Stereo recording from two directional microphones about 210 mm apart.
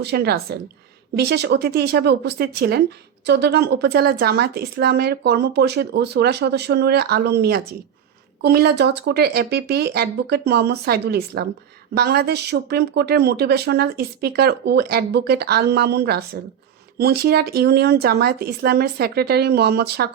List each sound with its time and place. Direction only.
0.0 s speech: 50° right (ahead or behind)